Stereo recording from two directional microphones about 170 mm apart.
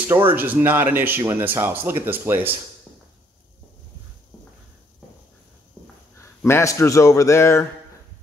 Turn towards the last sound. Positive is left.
turn(degrees=15)  # may be behind; listen again after turning